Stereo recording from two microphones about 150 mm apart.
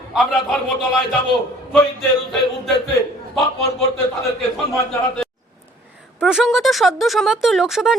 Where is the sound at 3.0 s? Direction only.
20° left (ahead or behind).